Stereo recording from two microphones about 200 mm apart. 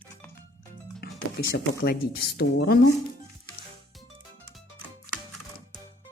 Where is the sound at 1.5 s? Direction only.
50° left (ahead or behind).